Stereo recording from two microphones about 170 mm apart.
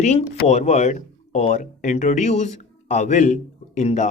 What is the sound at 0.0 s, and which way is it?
Speech, 40° left (ahead or behind).